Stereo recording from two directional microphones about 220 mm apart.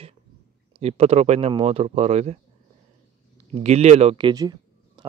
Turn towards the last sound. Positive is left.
turn(degrees=-20)  # may be behind; listen again after turning